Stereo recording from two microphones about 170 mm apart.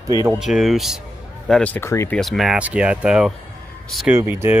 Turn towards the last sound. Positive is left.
turn(degrees=-10)  # may be behind; listen again after turning